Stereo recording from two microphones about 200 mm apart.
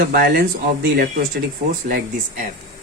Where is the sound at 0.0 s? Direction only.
50° right (ahead or behind).